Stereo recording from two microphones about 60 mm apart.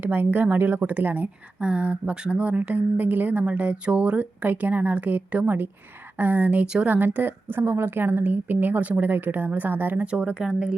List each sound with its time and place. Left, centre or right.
0.0 s speech: right
10.1 s speech: centre